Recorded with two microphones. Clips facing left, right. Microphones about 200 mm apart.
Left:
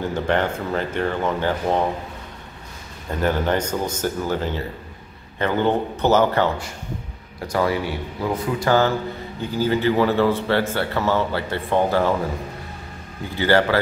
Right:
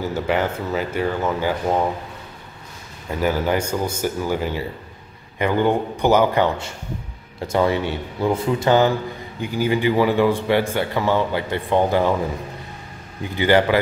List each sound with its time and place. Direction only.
0.0 s a man's voice: 5° right (ahead or behind)
3.1 s a man's voice: 10° right (ahead or behind)
7.3 s a man's voice: 25° right (ahead or behind)
13.2 s a man's voice: 15° right (ahead or behind)